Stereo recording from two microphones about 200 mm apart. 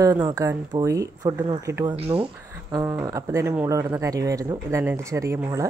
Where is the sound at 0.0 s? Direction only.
15° right (ahead or behind).